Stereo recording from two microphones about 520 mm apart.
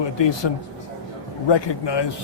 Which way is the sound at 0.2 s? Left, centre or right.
Left.